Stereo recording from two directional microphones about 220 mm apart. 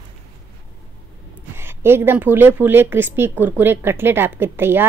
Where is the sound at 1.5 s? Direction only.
10° right (ahead or behind).